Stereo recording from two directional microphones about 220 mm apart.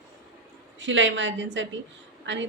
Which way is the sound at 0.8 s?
55° right (ahead or behind).